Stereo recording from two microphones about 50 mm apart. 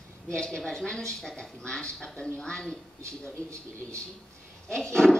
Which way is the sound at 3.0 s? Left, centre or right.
Right.